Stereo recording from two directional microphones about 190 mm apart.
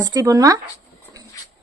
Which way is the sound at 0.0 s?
20° right (ahead or behind).